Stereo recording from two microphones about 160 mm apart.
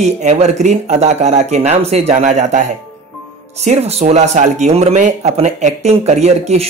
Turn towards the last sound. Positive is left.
turn(degrees=-45)  # may be behind; listen again after turning